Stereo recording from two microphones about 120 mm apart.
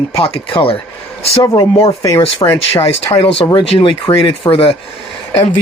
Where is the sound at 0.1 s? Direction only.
50° left (ahead or behind).